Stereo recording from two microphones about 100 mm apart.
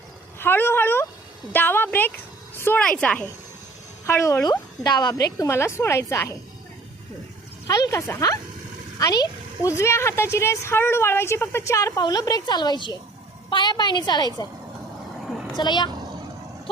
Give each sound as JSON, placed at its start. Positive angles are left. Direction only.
{"t": 0.3, "sound": "speech", "side_deg": 20}
{"t": 2.8, "sound": "speech", "side_deg": 10}
{"t": 4.0, "sound": "a woman's voice", "side_deg": 30}
{"t": 7.7, "sound": "a woman's voice", "side_deg": 35}
{"t": 15.5, "sound": "a woman's voice", "side_deg": 50}